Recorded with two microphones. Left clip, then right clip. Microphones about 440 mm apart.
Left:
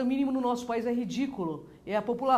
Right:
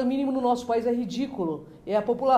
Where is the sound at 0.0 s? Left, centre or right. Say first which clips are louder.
Right 4 dB; left.